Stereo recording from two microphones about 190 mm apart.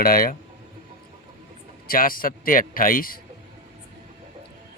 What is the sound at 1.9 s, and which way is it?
A man's voice, 50° left (ahead or behind).